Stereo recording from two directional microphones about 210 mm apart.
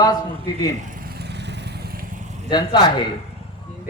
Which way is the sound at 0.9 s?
45° right (ahead or behind).